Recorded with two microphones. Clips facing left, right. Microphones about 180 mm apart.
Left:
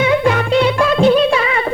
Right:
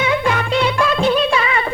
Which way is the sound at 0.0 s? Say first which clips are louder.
Left 4 dB; 45° left (ahead or behind).